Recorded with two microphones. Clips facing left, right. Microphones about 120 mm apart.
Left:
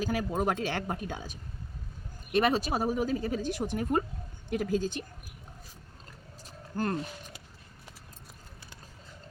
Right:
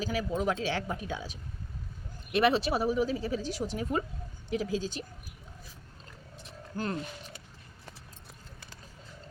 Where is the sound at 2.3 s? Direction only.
45° left (ahead or behind).